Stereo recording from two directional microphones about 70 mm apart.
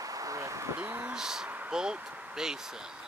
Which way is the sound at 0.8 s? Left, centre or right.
Right.